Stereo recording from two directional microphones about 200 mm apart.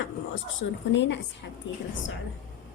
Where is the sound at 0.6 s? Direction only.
55° left (ahead or behind).